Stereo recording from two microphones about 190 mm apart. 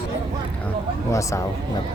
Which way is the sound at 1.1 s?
15° left (ahead or behind).